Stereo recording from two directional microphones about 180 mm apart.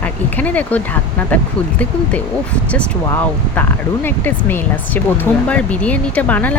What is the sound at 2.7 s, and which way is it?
Speech, 10° left (ahead or behind).